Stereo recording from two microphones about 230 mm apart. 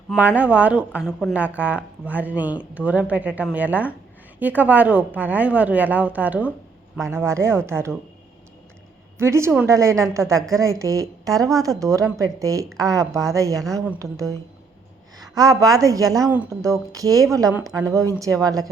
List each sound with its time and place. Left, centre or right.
0.2 s a woman's voice: centre
9.1 s a woman's voice: centre